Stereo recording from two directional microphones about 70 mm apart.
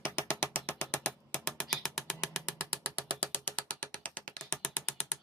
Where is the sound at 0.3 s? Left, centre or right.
Left.